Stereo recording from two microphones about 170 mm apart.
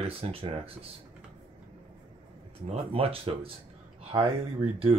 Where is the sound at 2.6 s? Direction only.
35° right (ahead or behind).